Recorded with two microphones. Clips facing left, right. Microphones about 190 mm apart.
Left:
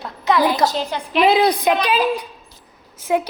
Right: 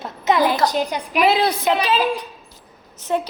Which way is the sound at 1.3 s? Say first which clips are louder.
Left 3 dB; 15° left (ahead or behind).